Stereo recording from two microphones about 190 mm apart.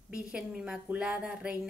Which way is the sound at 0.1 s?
5° right (ahead or behind).